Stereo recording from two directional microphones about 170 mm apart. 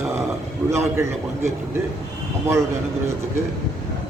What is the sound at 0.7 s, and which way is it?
Speech, 15° right (ahead or behind).